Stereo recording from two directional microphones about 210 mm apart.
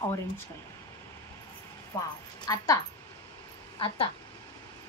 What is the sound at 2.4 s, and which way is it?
Speech, 20° left (ahead or behind).